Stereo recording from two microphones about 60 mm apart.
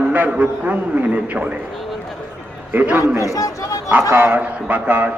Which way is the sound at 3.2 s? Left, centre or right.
Left.